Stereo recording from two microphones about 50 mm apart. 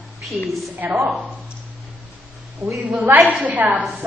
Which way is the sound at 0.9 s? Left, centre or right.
Centre.